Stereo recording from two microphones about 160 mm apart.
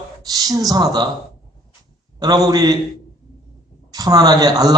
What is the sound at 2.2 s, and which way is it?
Speech, 25° right (ahead or behind).